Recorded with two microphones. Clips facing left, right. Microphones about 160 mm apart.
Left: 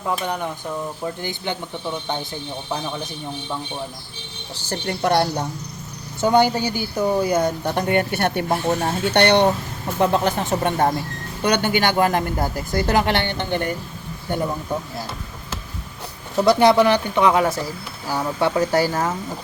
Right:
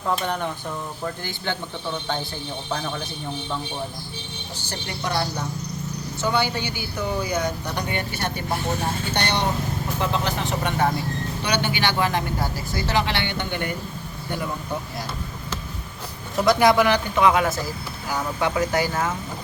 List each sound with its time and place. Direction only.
0.0 s speech: 5° left (ahead or behind)
2.6 s speech: 15° left (ahead or behind)
4.6 s speech: 55° left (ahead or behind)
6.2 s a woman's voice: 45° left (ahead or behind); by 9.5 s 60° left (ahead or behind)
10.0 s a woman's voice: 50° left (ahead or behind)
16.4 s speech: 30° left (ahead or behind)